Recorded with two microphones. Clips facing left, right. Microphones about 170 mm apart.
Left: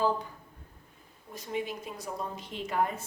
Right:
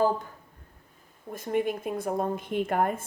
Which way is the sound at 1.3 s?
50° right (ahead or behind).